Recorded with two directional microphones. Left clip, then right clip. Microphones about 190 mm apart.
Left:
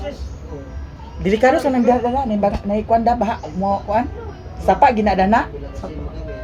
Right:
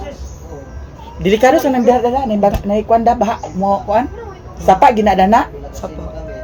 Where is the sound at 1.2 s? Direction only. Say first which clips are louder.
Right 4 dB; 20° right (ahead or behind).